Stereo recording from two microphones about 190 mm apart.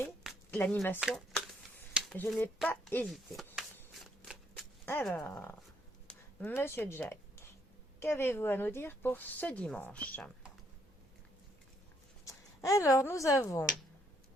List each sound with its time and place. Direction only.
0.2 s a sound: centre (ahead or behind)
0.6 s speech: 10° left (ahead or behind)
0.9 s speech: centre (ahead or behind)
1.9 s a sound: 5° right (ahead or behind)
2.1 s speech: 10° left (ahead or behind)
5.0 s speech: 5° left (ahead or behind)
12.2 s speech: 15° left (ahead or behind)